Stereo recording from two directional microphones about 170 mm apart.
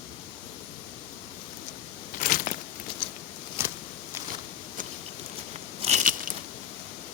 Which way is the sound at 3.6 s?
15° right (ahead or behind).